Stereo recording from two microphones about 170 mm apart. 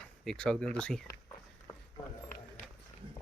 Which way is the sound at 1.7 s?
20° left (ahead or behind).